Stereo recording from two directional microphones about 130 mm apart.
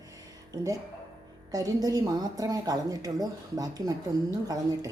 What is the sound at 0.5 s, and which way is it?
A woman's voice, 25° right (ahead or behind).